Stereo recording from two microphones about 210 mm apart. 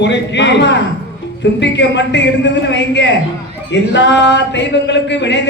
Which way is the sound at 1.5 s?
55° left (ahead or behind).